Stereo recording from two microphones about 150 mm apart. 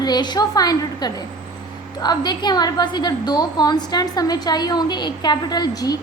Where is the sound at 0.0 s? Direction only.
30° left (ahead or behind).